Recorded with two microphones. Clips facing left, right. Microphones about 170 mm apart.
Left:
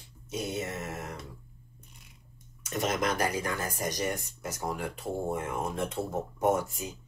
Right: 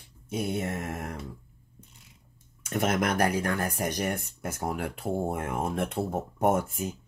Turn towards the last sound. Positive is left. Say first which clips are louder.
# right 2 dB
turn(degrees=-55)  # may be behind; listen again after turning